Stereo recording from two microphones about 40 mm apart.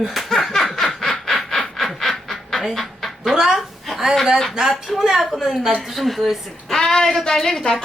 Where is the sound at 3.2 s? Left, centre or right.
Centre.